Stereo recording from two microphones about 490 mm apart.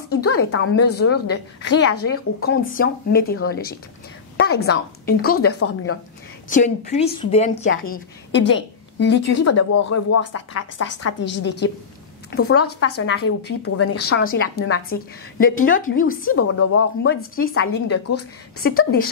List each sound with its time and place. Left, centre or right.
0.1 s a woman's voice: centre